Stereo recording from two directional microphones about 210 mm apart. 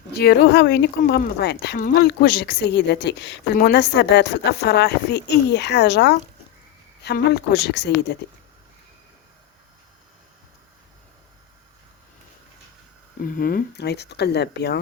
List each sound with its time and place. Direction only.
0.2 s speech: 50° left (ahead or behind)
13.2 s speech: 40° left (ahead or behind)